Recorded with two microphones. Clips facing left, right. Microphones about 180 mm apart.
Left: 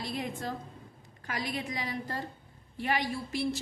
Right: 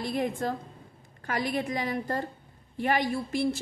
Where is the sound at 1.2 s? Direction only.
50° right (ahead or behind).